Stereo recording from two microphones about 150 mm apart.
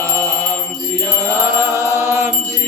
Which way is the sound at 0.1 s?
20° right (ahead or behind).